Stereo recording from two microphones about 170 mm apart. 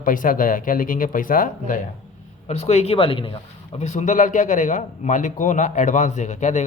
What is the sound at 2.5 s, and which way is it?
Speech, 40° left (ahead or behind).